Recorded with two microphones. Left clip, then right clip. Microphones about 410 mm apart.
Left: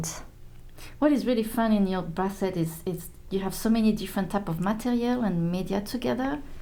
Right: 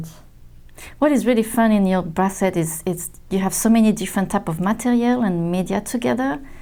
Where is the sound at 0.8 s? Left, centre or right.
Right.